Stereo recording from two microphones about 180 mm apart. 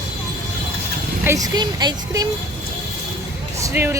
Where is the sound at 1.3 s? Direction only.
10° right (ahead or behind).